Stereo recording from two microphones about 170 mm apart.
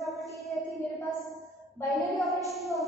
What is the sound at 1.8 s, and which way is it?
Speech, centre (ahead or behind).